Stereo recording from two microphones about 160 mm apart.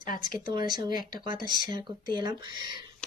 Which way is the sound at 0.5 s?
25° right (ahead or behind).